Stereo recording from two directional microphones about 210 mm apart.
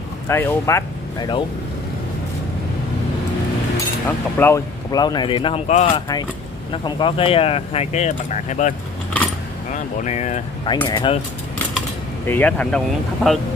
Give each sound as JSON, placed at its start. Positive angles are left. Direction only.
{"t": 0.3, "sound": "speech", "side_deg": 10}
{"t": 4.4, "sound": "speech", "side_deg": 15}
{"t": 10.8, "sound": "speech", "side_deg": 20}
{"t": 12.3, "sound": "speech", "side_deg": 5}